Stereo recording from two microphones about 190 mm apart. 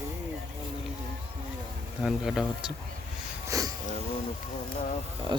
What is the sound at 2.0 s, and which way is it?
Speech, 5° right (ahead or behind).